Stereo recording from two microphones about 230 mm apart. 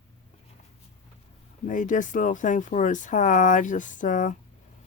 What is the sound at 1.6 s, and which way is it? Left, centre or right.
Speech, left.